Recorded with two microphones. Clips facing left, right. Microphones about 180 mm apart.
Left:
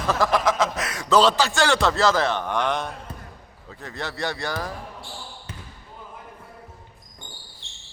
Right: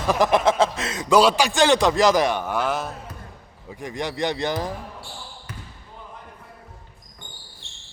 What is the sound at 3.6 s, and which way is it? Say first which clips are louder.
A man's voice: right 4 dB; 15° right (ahead or behind).